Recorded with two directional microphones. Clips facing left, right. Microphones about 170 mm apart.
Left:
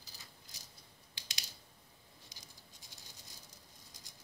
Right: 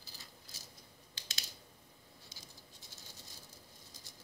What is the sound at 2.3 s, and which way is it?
Patter, 15° left (ahead or behind).